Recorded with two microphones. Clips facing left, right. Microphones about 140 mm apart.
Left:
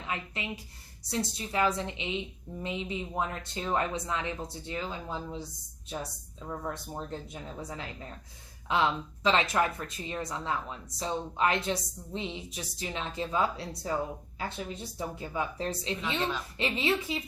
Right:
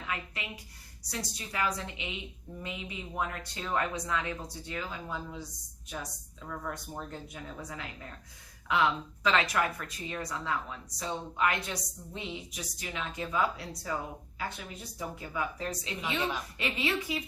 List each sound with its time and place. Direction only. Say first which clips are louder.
0.1 s speech: left 3 dB; 25° left (ahead or behind)